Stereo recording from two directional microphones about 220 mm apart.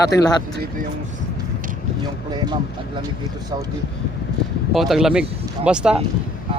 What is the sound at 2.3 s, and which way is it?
Speech, 20° right (ahead or behind).